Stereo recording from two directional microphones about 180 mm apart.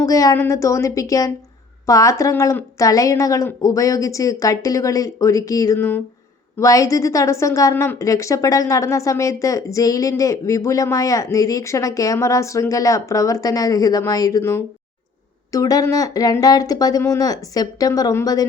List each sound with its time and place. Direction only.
0.0 s a woman's voice: 20° left (ahead or behind)